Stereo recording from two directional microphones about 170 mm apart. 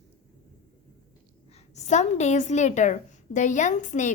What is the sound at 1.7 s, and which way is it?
A woman's voice, 40° left (ahead or behind).